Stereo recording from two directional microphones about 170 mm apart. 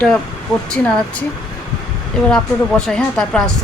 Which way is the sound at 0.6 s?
5° left (ahead or behind).